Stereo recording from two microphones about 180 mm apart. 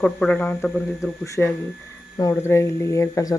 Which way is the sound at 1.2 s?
15° left (ahead or behind).